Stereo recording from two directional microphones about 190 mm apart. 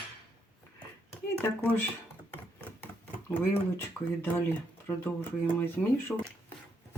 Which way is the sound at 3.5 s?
10° left (ahead or behind).